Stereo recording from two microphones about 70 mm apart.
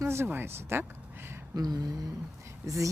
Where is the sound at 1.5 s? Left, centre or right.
Right.